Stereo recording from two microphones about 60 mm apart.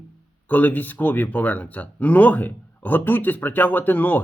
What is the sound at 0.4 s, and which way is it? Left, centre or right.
Speech, left.